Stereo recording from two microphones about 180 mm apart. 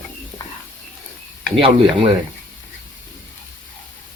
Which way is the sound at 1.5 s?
30° right (ahead or behind).